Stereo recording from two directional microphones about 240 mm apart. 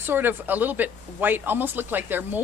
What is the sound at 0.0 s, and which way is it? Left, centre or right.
Speech, centre.